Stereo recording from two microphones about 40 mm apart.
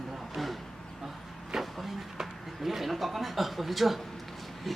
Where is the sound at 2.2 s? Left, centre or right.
Centre.